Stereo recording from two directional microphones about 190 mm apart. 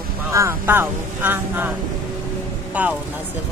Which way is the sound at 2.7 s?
10° right (ahead or behind).